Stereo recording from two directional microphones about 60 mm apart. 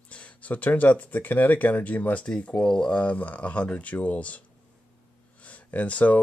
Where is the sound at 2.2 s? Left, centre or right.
Centre.